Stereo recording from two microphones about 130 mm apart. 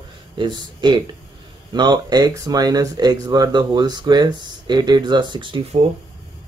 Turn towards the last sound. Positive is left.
turn(degrees=-40)  # may be behind; listen again after turning